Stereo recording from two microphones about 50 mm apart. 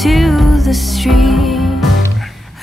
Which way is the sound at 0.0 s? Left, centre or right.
Centre.